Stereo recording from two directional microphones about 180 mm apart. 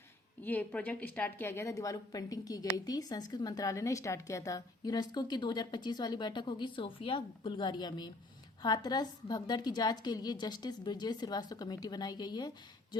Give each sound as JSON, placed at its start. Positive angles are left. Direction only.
{"t": 0.4, "sound": "a woman's voice", "side_deg": 10}